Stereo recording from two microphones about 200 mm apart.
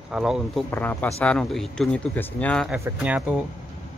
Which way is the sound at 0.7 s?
10° left (ahead or behind).